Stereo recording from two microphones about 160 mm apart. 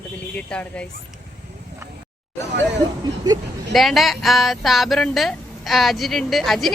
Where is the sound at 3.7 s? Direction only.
Centre (ahead or behind).